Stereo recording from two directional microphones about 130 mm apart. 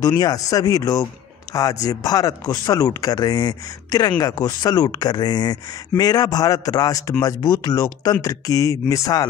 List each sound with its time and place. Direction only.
0.0 s speech: 30° left (ahead or behind)